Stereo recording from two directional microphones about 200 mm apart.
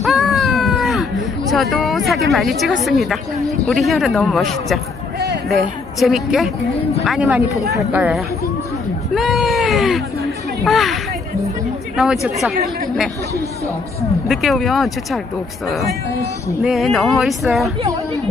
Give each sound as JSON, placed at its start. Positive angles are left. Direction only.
{"t": 0.0, "sound": "a sound", "side_deg": 0}
{"t": 1.5, "sound": "speech", "side_deg": 0}
{"t": 14.2, "sound": "speech", "side_deg": 0}
{"t": 16.6, "sound": "speech", "side_deg": 0}